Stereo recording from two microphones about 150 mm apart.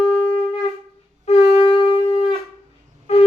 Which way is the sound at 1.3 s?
40° left (ahead or behind).